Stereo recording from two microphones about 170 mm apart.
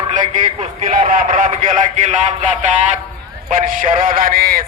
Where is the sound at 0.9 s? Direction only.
50° right (ahead or behind).